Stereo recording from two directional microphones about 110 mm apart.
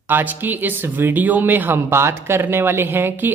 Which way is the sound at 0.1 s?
15° right (ahead or behind).